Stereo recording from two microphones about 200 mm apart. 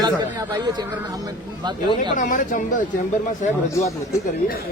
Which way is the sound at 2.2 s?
40° left (ahead or behind).